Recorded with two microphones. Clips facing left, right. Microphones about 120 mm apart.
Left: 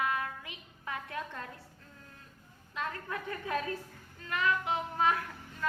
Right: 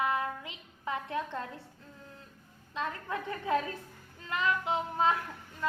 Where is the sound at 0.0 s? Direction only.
25° right (ahead or behind).